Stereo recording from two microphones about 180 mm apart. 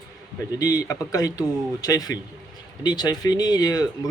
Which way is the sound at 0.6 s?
20° left (ahead or behind).